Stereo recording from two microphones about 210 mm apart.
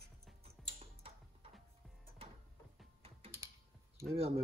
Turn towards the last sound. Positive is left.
turn(degrees=-30)  # may be behind; listen again after turning